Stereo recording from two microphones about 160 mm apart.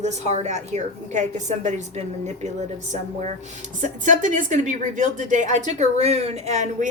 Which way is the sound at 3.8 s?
55° right (ahead or behind).